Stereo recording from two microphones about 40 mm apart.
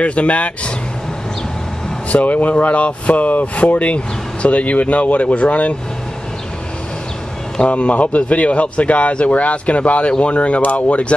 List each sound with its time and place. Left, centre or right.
0.0 s speech: left
2.2 s speech: left
2.5 s speech: left
7.7 s speech: left